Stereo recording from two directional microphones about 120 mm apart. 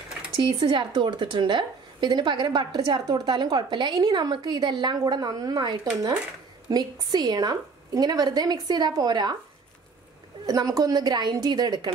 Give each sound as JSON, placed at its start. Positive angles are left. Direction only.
{"t": 0.4, "sound": "a woman's voice", "side_deg": -45}
{"t": 10.4, "sound": "a woman's voice", "side_deg": -30}